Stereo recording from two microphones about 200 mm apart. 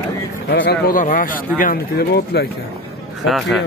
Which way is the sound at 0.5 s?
55° left (ahead or behind).